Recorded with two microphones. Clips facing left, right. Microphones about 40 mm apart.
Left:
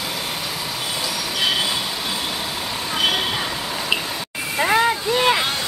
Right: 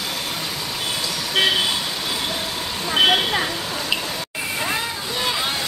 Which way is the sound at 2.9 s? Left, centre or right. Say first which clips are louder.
Right 4 dB; right.